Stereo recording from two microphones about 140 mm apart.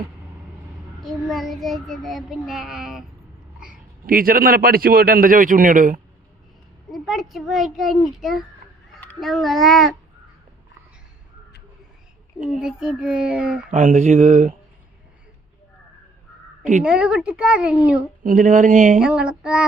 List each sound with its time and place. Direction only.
1.0 s child singing: centre (ahead or behind)
4.0 s a man's voice: 90° right; by 6.0 s 70° right (ahead or behind)
6.9 s child singing: centre (ahead or behind)
12.5 s child singing: 5° right (ahead or behind)
13.7 s speech: 60° right (ahead or behind)
16.8 s a woman's voice: 5° right (ahead or behind)
18.2 s speech: 70° right (ahead or behind)
18.9 s a woman's voice: 5° right (ahead or behind)